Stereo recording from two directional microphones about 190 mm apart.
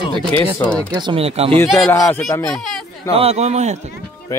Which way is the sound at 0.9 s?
25° right (ahead or behind).